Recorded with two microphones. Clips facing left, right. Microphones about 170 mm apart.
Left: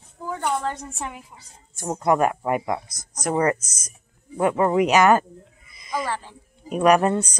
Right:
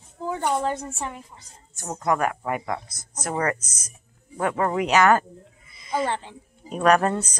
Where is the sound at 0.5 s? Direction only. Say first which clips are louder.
Right 2 dB; 5° right (ahead or behind).